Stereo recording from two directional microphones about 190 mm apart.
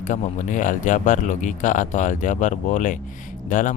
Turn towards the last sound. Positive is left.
turn(degrees=40)  # may be behind; listen again after turning